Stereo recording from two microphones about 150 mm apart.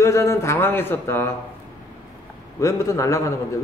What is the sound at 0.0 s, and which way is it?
A man's voice, 20° left (ahead or behind).